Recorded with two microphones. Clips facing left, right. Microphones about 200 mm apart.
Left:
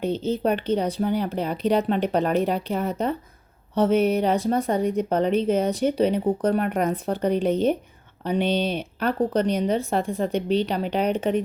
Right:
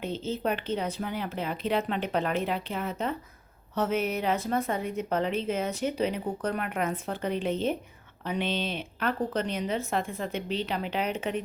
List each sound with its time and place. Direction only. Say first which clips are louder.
0.3 s a woman's voice: left 6 dB; 35° left (ahead or behind)